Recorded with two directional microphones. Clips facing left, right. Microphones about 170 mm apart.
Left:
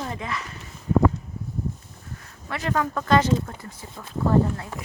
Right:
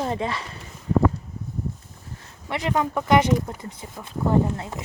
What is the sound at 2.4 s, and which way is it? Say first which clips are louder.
Speech: right 2 dB; 20° right (ahead or behind).